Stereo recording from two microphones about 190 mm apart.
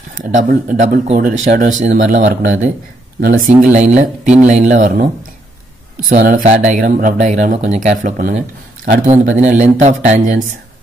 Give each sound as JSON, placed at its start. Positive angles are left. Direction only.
{"t": 0.2, "sound": "speech", "side_deg": -40}